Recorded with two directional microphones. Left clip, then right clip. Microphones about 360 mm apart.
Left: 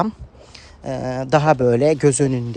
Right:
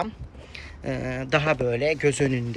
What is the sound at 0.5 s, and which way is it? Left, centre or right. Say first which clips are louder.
Speech: left 4 dB; centre.